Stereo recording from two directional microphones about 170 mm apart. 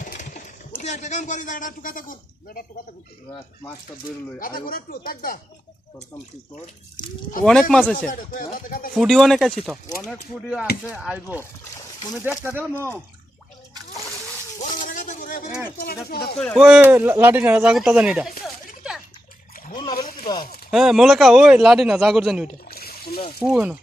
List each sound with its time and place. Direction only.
0.0 s speech: 50° left (ahead or behind)
4.4 s speech: 55° left (ahead or behind)
7.4 s speech: 5° left (ahead or behind)
7.9 s speech: 55° left (ahead or behind)
9.0 s speech: centre (ahead or behind)
14.6 s a sound: 50° left (ahead or behind)
16.0 s speech: 65° left (ahead or behind)
16.4 s speech: centre (ahead or behind)
19.7 s a sound: 25° left (ahead or behind)
20.7 s speech: centre (ahead or behind)